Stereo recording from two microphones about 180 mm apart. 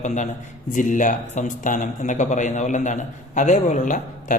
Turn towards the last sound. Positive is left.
turn(degrees=45)  # may be behind; listen again after turning